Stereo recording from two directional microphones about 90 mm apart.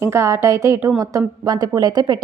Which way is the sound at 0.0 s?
30° right (ahead or behind).